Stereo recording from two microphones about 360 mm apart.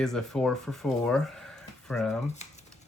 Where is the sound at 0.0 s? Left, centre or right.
Centre.